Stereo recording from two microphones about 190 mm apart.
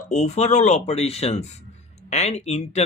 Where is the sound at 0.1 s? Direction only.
35° left (ahead or behind).